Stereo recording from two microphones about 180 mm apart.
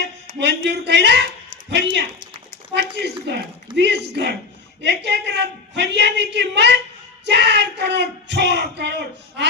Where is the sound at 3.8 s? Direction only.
75° right (ahead or behind).